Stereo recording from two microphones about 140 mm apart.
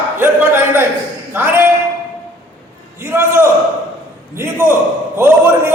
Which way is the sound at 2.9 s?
15° right (ahead or behind).